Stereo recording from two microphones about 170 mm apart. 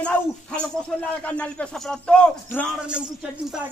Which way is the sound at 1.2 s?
5° left (ahead or behind).